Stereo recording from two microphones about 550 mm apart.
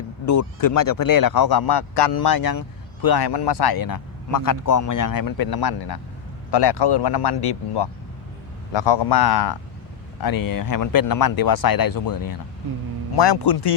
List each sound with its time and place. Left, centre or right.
0.3 s speech: left
13.1 s speech: left